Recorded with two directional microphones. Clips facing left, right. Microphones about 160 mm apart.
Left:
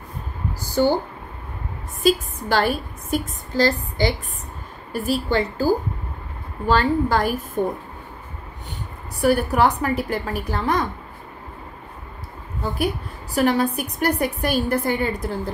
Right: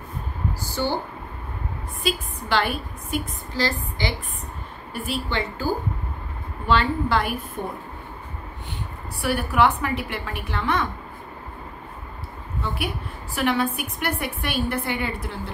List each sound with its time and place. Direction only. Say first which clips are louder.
2.0 s a woman's voice: left 7 dB; 40° left (ahead or behind)
9.2 s a woman's voice: left 3 dB; 40° left (ahead or behind)
12.6 s a woman's voice: left 6 dB; 40° left (ahead or behind)